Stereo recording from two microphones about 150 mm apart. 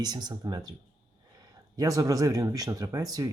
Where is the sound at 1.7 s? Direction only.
20° right (ahead or behind).